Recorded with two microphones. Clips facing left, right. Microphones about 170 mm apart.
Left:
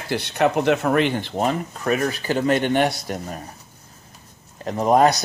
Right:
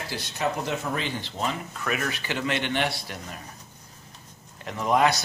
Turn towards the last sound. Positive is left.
turn(degrees=40)  # may be behind; listen again after turning